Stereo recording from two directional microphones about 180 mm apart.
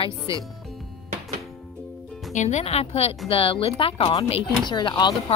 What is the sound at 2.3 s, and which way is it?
A woman's voice, 40° left (ahead or behind).